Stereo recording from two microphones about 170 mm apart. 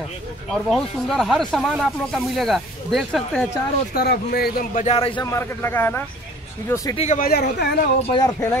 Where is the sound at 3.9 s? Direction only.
65° left (ahead or behind).